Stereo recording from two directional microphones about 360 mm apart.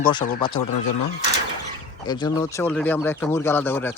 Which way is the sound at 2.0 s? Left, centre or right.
Centre.